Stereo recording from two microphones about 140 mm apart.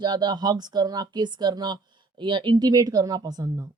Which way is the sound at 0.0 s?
30° right (ahead or behind).